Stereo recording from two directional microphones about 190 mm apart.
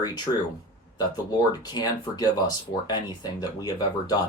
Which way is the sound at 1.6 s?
20° left (ahead or behind).